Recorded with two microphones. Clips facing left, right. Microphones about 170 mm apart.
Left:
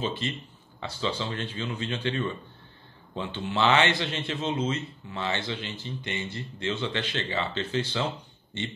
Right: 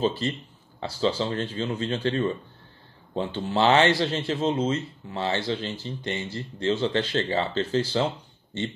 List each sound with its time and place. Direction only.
0.0 s speech: 35° right (ahead or behind)